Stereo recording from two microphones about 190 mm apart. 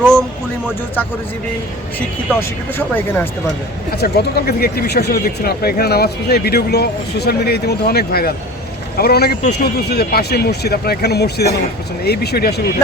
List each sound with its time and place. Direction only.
0.0 s speech: 5° left (ahead or behind)
2.4 s speech: 10° left (ahead or behind)
3.9 s speech: 55° left (ahead or behind)